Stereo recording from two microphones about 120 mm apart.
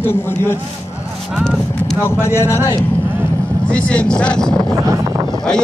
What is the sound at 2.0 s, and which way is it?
Speech, 20° left (ahead or behind).